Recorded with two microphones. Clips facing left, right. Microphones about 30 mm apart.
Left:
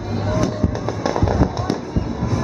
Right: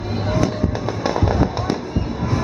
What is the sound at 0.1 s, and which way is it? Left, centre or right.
Fireworks, centre.